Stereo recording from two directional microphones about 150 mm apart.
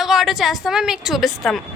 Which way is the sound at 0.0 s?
Centre (ahead or behind).